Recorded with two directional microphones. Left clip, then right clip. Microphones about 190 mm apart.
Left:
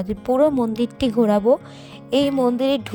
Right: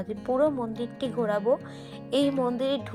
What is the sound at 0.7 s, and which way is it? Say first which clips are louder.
A woman's voice: left 9 dB; 55° left (ahead or behind).